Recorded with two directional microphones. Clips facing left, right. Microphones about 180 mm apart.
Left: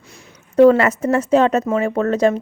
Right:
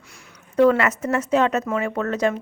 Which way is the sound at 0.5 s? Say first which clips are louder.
Left 6 dB; 35° left (ahead or behind).